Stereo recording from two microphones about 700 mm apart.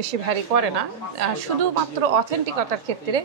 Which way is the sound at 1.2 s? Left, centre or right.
Right.